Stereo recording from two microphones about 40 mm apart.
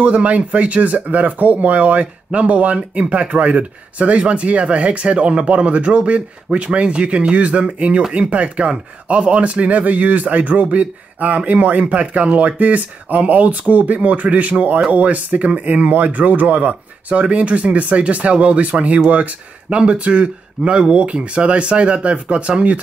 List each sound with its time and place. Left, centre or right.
0.0 s speech: right